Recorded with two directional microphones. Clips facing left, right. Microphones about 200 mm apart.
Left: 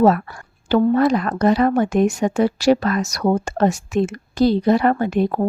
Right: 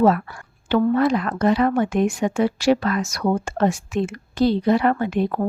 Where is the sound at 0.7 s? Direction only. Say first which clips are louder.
Left 2 dB; 40° left (ahead or behind).